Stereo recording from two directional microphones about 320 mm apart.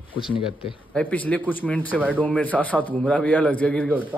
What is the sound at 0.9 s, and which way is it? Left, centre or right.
A man's voice, centre.